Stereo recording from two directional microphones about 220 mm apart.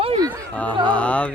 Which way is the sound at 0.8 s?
5° left (ahead or behind).